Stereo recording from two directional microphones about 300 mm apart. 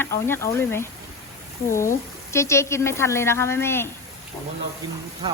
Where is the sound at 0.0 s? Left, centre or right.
Centre.